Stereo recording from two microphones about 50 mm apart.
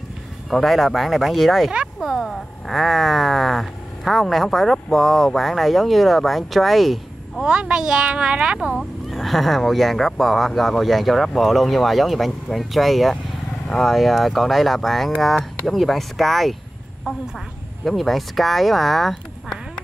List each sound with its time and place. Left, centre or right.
0.5 s speech: centre
7.4 s speech: centre
9.1 s speech: centre
17.8 s speech: centre